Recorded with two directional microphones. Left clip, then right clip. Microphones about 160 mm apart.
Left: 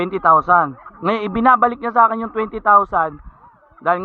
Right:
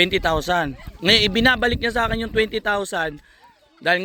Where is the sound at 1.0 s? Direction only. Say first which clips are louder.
Left 1 dB; 5° right (ahead or behind).